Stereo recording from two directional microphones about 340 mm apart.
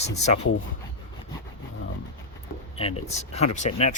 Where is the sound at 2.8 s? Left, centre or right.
Centre.